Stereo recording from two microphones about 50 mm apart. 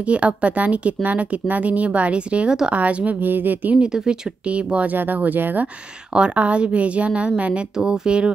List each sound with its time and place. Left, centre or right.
0.0 s speech: right
3.2 s speech: right
3.7 s speech: centre
4.5 s speech: right
4.9 s speech: right
6.1 s speech: right
7.7 s speech: centre